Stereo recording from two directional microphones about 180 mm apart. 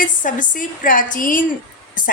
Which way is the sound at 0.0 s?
45° left (ahead or behind).